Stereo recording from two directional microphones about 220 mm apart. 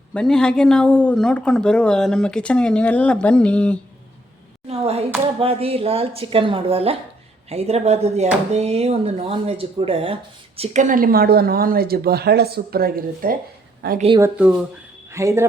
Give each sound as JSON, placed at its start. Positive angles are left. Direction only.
{"t": 0.1, "sound": "speech", "side_deg": 5}
{"t": 4.7, "sound": "clapping", "side_deg": -30}
{"t": 5.4, "sound": "speech", "side_deg": -25}
{"t": 14.2, "sound": "speech", "side_deg": -5}